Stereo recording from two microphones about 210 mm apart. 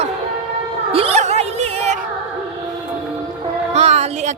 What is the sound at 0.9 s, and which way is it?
A woman's voice, 25° right (ahead or behind).